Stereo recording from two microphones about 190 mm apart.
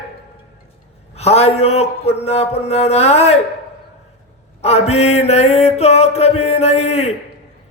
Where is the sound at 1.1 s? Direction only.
35° left (ahead or behind).